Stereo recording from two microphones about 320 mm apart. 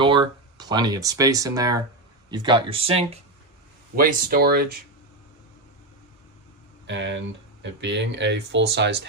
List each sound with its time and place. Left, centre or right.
0.0 s speech: centre
6.8 s speech: right